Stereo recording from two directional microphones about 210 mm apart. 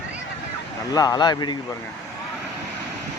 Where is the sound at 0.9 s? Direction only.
20° left (ahead or behind).